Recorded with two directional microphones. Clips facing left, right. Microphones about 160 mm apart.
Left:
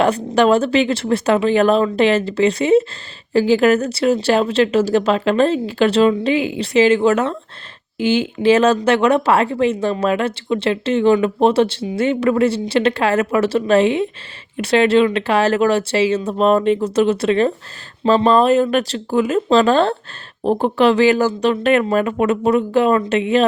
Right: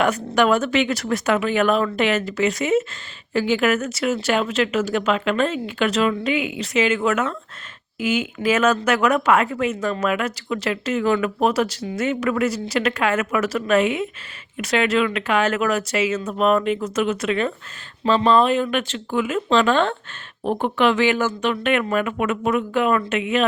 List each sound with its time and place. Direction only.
0.3 s speech: 30° left (ahead or behind)